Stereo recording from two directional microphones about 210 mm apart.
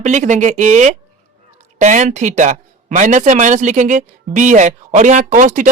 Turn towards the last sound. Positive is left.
turn(degrees=-35)  # may be behind; listen again after turning